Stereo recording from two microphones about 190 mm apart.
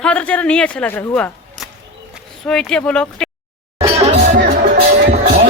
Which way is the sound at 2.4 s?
Centre (ahead or behind).